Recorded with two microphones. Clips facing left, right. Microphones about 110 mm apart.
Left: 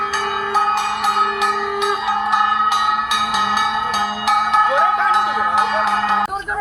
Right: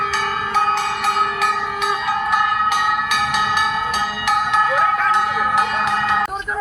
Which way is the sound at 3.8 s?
30° left (ahead or behind).